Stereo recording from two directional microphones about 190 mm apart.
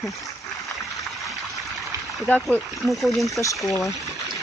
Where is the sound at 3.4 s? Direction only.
15° left (ahead or behind).